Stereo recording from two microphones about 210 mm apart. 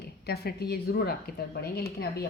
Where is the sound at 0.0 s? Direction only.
50° left (ahead or behind).